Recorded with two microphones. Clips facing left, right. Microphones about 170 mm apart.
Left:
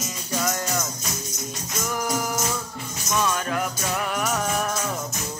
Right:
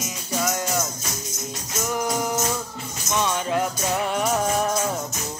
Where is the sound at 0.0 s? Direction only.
10° right (ahead or behind).